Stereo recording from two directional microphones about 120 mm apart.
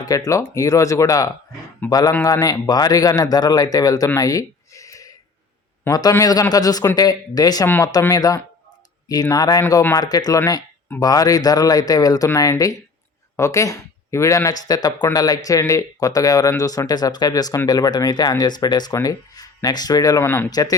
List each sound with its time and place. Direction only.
0.0 s speech: 30° left (ahead or behind)
4.2 s a sound: 30° left (ahead or behind)
5.9 s speech: 30° left (ahead or behind)
20.2 s speech: 20° left (ahead or behind)
20.5 s speech: 30° left (ahead or behind)